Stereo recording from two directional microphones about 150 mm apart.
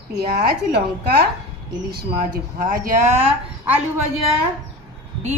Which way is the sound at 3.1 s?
10° right (ahead or behind).